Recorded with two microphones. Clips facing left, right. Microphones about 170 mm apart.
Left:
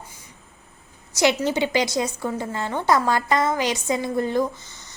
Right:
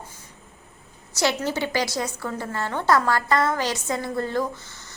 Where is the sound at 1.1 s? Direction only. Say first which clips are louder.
Left 4 dB; 15° left (ahead or behind).